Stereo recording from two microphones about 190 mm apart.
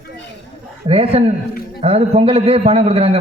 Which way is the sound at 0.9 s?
30° right (ahead or behind).